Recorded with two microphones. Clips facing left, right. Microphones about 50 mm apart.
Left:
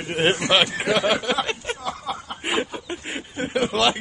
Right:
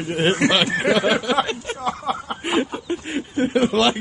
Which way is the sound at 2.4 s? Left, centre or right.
Centre.